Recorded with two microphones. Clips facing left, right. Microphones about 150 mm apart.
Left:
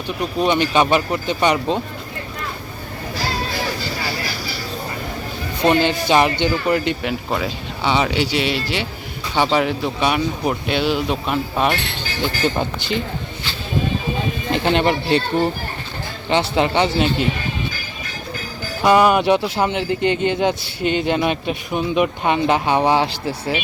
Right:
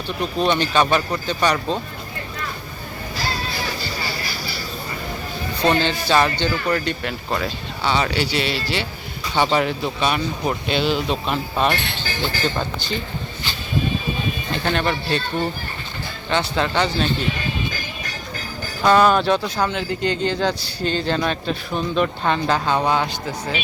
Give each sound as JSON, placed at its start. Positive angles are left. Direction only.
{"t": 0.2, "sound": "a man's voice", "side_deg": 15}
{"t": 5.6, "sound": "a man's voice", "side_deg": 15}
{"t": 14.5, "sound": "speech", "side_deg": 20}
{"t": 18.8, "sound": "a man's voice", "side_deg": 10}